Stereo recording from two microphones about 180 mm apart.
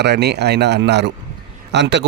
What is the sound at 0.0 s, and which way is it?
Speech, 70° right (ahead or behind).